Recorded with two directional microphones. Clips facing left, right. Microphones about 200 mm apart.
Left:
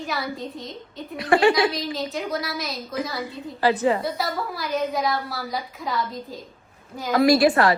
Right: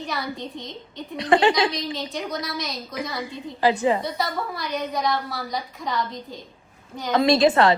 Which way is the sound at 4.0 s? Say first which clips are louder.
Even; centre (ahead or behind).